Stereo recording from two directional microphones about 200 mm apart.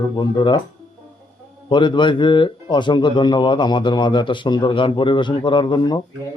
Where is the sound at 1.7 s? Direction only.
25° left (ahead or behind).